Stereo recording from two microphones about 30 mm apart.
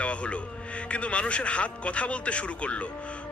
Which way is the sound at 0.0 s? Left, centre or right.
Left.